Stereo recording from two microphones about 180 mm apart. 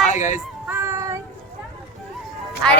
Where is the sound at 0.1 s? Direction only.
40° left (ahead or behind).